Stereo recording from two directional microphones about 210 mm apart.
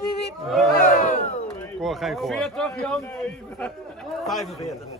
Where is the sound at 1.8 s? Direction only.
Centre (ahead or behind).